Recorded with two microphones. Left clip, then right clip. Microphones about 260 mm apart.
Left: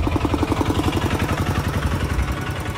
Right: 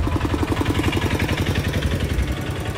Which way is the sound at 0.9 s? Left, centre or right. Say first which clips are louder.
Even; centre.